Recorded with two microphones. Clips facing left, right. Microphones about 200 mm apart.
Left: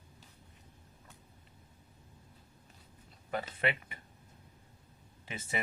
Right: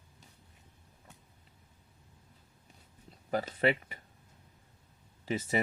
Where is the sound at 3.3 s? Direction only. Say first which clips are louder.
Right 5 dB; 35° right (ahead or behind).